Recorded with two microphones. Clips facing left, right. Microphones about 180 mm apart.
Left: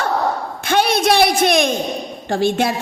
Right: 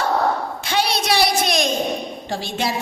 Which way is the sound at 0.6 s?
55° left (ahead or behind).